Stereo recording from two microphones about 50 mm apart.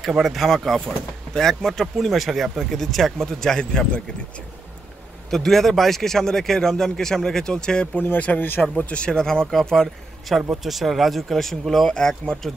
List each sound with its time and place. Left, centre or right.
0.1 s speech: centre
5.3 s a man's voice: centre
8.2 s speech: left
8.7 s a man's voice: left; by 11.9 s centre
11.9 s a man's voice: centre